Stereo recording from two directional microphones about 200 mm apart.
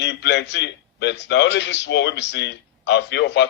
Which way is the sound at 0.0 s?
60° left (ahead or behind).